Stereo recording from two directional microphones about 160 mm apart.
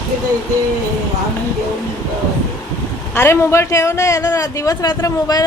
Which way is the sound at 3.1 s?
15° left (ahead or behind).